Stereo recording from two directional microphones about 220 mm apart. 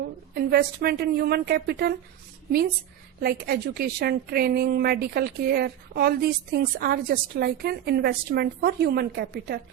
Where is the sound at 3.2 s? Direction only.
45° right (ahead or behind).